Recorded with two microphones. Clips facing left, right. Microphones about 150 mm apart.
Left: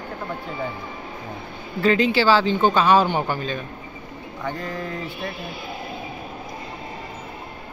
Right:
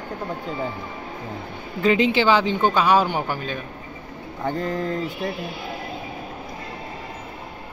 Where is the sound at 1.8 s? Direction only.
20° right (ahead or behind).